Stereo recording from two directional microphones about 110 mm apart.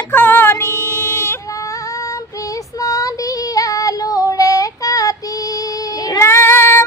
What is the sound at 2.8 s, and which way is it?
Female singing, 30° left (ahead or behind).